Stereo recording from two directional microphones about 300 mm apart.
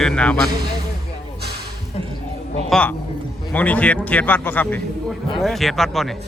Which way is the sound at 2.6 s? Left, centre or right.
Centre.